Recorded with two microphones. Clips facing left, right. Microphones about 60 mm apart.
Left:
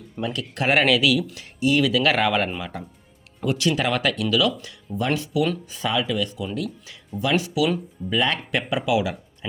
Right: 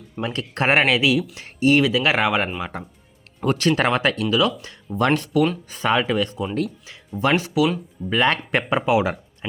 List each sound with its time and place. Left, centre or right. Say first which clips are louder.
0.3 s speech: right 2 dB; right
1.4 s speech: right 4 dB; right
1.8 s speech: right 1 dB; right
3.4 s speech: right 3 dB; right
4.9 s speech: right 5 dB; right
5.8 s speech: right 4 dB; right